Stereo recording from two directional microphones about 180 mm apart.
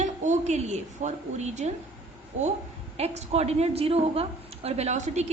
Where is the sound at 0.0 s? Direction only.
40° right (ahead or behind).